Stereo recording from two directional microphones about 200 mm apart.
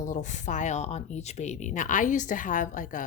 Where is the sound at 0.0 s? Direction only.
40° left (ahead or behind).